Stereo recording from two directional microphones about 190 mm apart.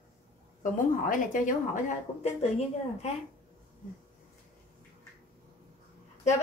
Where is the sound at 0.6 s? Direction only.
45° left (ahead or behind).